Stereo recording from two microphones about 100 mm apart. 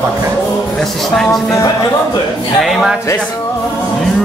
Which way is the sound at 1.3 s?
35° left (ahead or behind).